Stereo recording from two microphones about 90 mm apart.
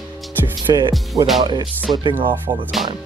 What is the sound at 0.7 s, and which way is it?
Speech, 55° right (ahead or behind).